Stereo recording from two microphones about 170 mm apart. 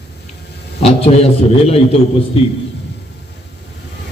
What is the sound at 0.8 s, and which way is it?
A man's voice, 35° left (ahead or behind).